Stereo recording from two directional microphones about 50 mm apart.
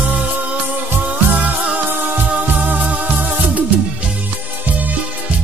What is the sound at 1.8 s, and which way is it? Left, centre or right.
Music, right.